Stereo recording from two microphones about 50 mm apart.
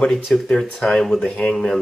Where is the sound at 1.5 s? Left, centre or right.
Centre.